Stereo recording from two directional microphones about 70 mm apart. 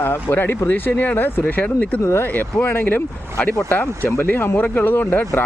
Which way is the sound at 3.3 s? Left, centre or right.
Centre.